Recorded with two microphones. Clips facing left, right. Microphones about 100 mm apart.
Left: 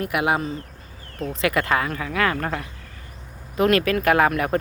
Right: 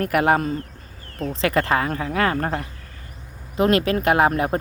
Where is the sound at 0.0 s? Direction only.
45° right (ahead or behind).